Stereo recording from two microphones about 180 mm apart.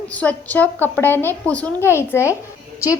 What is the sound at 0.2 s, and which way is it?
Speech, 10° left (ahead or behind).